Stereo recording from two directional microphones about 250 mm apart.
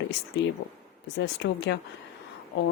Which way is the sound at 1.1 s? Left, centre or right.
Left.